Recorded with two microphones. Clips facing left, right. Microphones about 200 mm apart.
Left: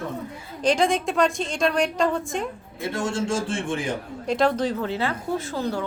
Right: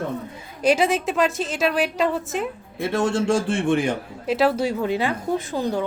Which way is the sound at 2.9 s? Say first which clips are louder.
Right 5 dB; 60° right (ahead or behind).